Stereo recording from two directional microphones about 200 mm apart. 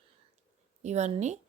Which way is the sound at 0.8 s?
35° right (ahead or behind).